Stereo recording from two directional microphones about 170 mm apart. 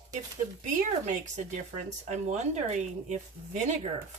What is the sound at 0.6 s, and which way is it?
Speech, 45° right (ahead or behind).